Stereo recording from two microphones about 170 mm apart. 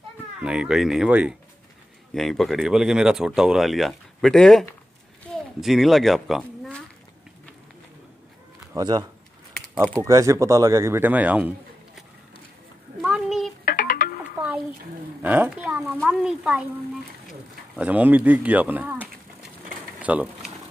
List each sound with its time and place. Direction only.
0.4 s speech: 5° right (ahead or behind)
8.7 s a man's voice: 25° right (ahead or behind)
13.0 s a sound: centre (ahead or behind)
13.7 s music: 50° left (ahead or behind)
15.2 s speech: 10° right (ahead or behind)
20.0 s a sound: 10° right (ahead or behind)